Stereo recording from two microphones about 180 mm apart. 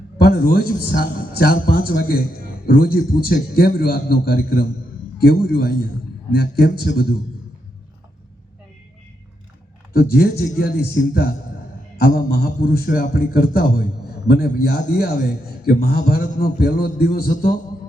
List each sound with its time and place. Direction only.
0.2 s a man's voice: 55° left (ahead or behind)
9.9 s a man's voice: 55° left (ahead or behind)